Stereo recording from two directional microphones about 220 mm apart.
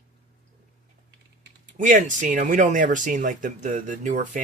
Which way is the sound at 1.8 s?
35° right (ahead or behind).